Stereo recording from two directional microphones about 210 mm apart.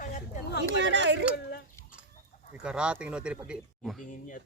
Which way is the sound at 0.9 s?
55° right (ahead or behind).